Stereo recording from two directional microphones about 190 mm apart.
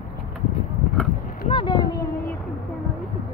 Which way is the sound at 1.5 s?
25° left (ahead or behind).